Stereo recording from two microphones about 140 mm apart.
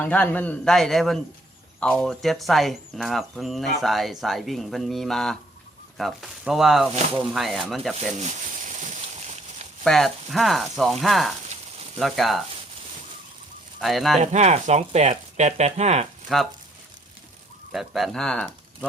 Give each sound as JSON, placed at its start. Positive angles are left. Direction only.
{"t": 0.0, "sound": "speech", "side_deg": 10}
{"t": 8.1, "sound": "a sound", "side_deg": -60}
{"t": 9.8, "sound": "speech", "side_deg": 0}
{"t": 13.8, "sound": "speech", "side_deg": 0}
{"t": 14.2, "sound": "speech", "side_deg": -55}
{"t": 17.7, "sound": "speech", "side_deg": 0}